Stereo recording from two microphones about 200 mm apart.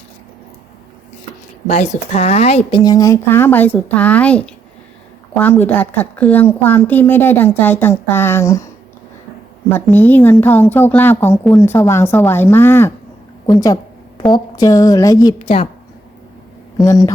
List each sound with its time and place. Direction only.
1.6 s a woman's voice: 35° left (ahead or behind); by 8.6 s 15° left (ahead or behind)
9.7 s a woman's voice: 10° left (ahead or behind)
15.4 s a woman's voice: 30° left (ahead or behind)
16.7 s a woman's voice: 20° left (ahead or behind)